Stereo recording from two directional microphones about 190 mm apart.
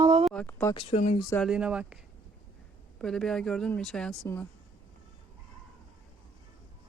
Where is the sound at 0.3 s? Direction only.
5° left (ahead or behind).